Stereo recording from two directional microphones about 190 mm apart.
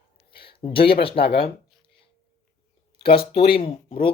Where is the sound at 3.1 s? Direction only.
30° left (ahead or behind).